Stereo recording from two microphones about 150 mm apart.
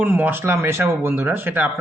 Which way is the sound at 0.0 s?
10° right (ahead or behind).